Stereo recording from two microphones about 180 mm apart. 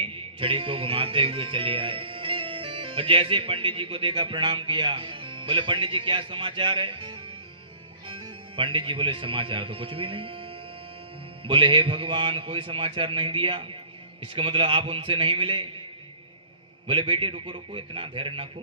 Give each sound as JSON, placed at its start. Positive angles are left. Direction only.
{"t": 0.0, "sound": "speech", "side_deg": -30}
{"t": 11.4, "sound": "a man's voice", "side_deg": -30}
{"t": 16.8, "sound": "a man's voice", "side_deg": -30}